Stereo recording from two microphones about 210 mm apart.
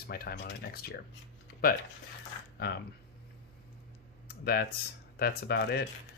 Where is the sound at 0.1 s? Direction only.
55° left (ahead or behind).